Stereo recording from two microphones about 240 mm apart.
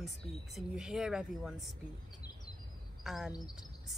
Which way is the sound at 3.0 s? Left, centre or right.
Centre.